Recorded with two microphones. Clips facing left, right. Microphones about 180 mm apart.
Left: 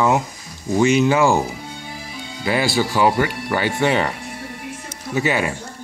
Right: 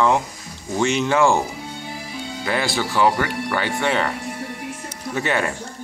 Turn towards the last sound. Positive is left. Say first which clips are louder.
# left 2 dB
turn(degrees=5)  # may be behind; listen again after turning